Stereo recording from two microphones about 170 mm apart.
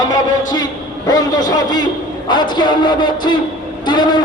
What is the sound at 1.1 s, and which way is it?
A man's voice, 20° left (ahead or behind).